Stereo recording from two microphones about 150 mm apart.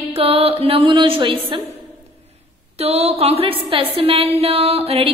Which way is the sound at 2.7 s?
45° right (ahead or behind).